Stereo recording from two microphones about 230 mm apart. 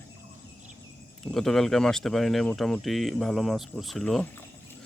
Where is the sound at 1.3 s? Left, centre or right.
Centre.